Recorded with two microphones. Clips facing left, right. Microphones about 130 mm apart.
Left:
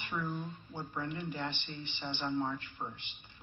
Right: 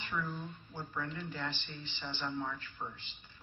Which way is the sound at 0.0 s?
20° left (ahead or behind).